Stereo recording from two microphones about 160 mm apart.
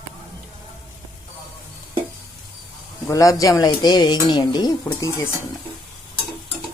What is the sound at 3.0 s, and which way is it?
Speech, 20° left (ahead or behind).